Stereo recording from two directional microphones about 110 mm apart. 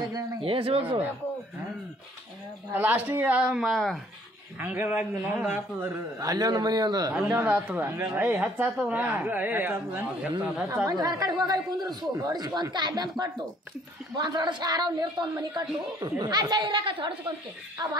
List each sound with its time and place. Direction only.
0.4 s speech: 55° right (ahead or behind)
2.7 s a woman's voice: 15° right (ahead or behind); by 4.0 s centre (ahead or behind)
4.6 s a woman's voice: 15° right (ahead or behind)
6.1 s speech: 35° right (ahead or behind)
7.2 s a woman's voice: 10° right (ahead or behind)
7.8 s a woman's voice: 20° right (ahead or behind)
10.9 s speech: 35° right (ahead or behind)
14.1 s a woman's voice: 40° right (ahead or behind)